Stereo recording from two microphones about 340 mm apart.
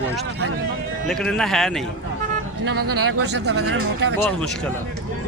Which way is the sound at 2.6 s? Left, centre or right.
Right.